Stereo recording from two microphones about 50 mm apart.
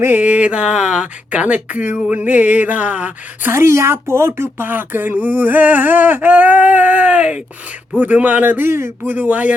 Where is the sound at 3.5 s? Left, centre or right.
Right.